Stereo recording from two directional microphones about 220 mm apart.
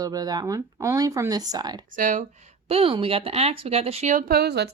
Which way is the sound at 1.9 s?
35° right (ahead or behind).